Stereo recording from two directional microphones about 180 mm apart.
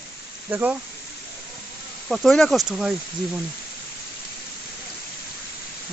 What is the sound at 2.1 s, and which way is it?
Speech, centre (ahead or behind).